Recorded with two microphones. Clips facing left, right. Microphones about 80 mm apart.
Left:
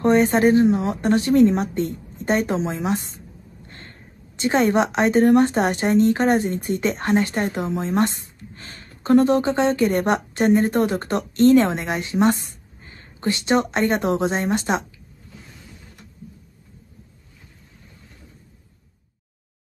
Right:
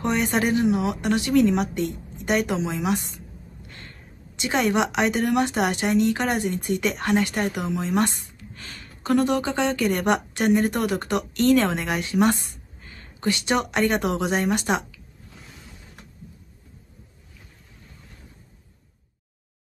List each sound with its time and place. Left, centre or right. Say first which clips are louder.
0.0 s a woman's voice: left 7 dB; left